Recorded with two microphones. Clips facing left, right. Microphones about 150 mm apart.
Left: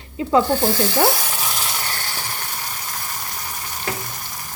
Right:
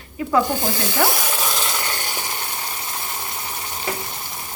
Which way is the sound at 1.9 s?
15° right (ahead or behind).